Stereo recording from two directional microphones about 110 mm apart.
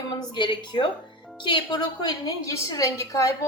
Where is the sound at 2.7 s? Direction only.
30° left (ahead or behind).